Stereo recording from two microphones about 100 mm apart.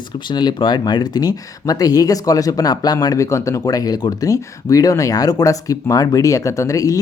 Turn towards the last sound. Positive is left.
turn(degrees=35)  # may be behind; listen again after turning